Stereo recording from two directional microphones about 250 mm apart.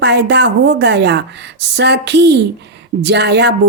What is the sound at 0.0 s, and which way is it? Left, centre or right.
A woman's voice, right.